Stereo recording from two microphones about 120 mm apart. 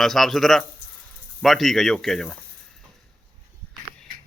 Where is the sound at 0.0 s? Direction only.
Centre (ahead or behind).